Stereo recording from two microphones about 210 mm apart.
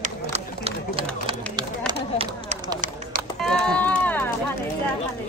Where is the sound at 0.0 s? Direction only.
30° right (ahead or behind).